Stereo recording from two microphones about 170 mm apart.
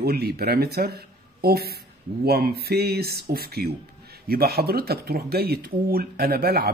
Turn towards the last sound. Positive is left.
turn(degrees=-65)  # may be behind; listen again after turning